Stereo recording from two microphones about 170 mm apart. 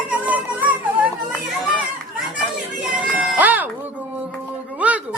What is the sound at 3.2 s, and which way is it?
Music, 5° right (ahead or behind).